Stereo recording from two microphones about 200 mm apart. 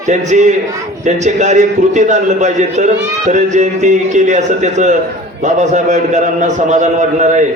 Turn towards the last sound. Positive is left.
turn(degrees=-40)  # may be behind; listen again after turning